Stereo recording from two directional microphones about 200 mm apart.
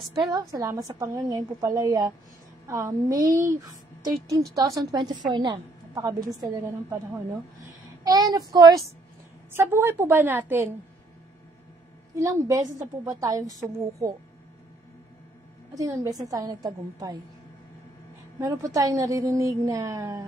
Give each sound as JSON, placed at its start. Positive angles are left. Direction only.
{"t": 0.2, "sound": "a woman's voice", "side_deg": -20}
{"t": 12.2, "sound": "a woman's voice", "side_deg": -15}
{"t": 15.7, "sound": "a woman's voice", "side_deg": -15}
{"t": 18.4, "sound": "a woman's voice", "side_deg": -15}